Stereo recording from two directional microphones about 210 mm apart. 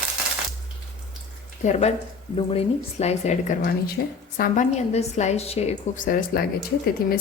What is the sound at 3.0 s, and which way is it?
Speech, 35° left (ahead or behind).